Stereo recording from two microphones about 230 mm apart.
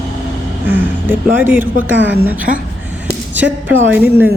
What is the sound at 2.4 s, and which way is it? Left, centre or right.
Speech, right.